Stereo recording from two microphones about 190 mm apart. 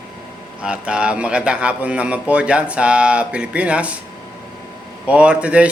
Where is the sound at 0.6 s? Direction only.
5° right (ahead or behind).